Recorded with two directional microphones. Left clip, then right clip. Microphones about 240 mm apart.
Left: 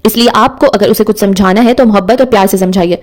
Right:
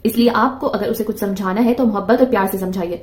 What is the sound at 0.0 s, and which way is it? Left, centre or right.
A woman's voice, left.